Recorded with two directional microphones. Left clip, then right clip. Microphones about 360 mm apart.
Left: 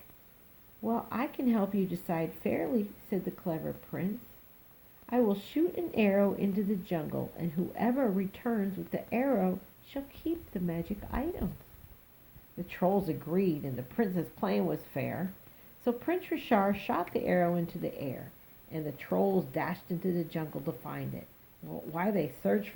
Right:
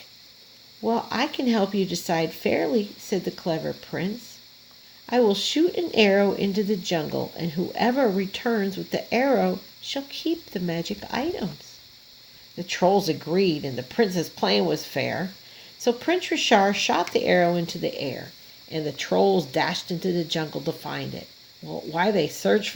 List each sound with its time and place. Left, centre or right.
0.9 s speech: right
12.6 s speech: right